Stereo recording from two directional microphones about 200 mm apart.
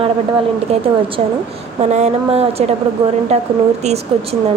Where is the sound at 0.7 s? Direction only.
30° right (ahead or behind).